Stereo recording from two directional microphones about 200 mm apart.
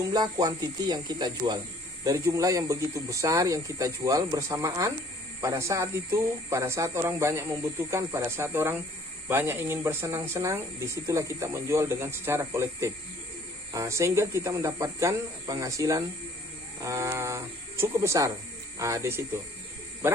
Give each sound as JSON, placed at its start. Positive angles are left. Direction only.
{"t": 0.1, "sound": "speech", "side_deg": -20}